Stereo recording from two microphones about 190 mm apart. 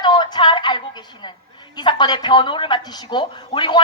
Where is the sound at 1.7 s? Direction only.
25° left (ahead or behind).